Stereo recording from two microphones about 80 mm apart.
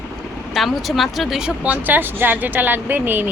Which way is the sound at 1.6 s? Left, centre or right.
Right.